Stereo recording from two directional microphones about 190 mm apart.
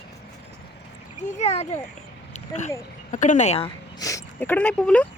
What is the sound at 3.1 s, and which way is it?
Speech, 40° left (ahead or behind).